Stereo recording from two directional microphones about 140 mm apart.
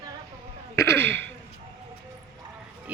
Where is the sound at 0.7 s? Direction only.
20° left (ahead or behind).